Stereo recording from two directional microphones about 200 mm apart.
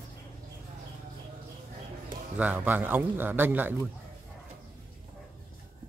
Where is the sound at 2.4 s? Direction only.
10° right (ahead or behind).